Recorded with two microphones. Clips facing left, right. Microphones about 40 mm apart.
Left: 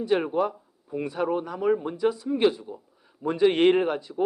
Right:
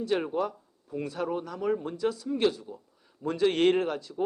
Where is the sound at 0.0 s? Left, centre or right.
Centre.